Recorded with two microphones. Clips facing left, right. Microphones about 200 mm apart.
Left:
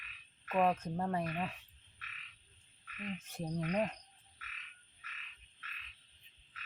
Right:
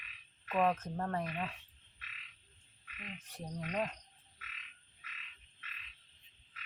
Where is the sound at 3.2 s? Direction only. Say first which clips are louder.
Left 4 dB; 25° left (ahead or behind).